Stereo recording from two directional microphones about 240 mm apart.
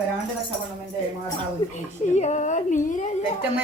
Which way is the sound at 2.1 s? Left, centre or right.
Left.